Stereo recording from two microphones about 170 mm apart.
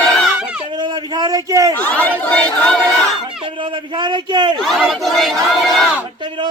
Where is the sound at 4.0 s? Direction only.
25° right (ahead or behind).